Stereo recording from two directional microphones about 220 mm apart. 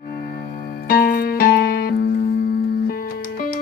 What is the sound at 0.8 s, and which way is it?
Music, 45° left (ahead or behind).